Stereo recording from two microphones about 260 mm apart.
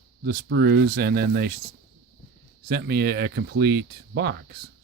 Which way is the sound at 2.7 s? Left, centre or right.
Right.